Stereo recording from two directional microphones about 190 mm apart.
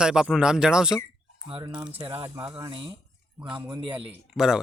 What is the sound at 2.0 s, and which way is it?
Speech, 30° right (ahead or behind).